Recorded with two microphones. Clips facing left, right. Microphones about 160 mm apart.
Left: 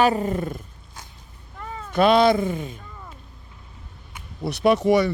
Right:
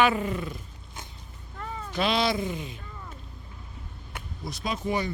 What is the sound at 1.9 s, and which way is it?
Speech, 50° left (ahead or behind).